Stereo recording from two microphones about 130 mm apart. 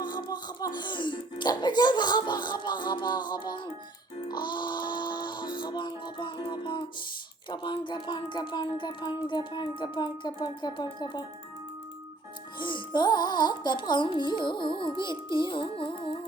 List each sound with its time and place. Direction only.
0.0 s music: 35° left (ahead or behind)
7.5 s speech: 35° left (ahead or behind)
12.5 s speech: 40° left (ahead or behind)